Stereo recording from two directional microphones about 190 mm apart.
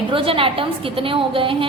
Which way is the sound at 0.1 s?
30° right (ahead or behind).